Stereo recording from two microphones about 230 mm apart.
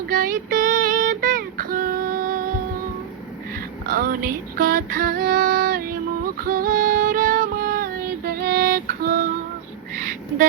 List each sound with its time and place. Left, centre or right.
0.1 s child singing: right
3.8 s female singing: right